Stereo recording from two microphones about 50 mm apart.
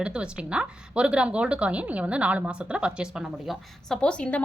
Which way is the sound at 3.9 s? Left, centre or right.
Centre.